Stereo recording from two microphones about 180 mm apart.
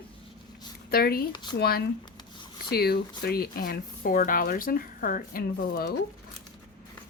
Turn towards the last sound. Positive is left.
turn(degrees=55)  # may be behind; listen again after turning